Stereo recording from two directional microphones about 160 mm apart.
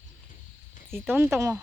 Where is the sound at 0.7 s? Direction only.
45° left (ahead or behind).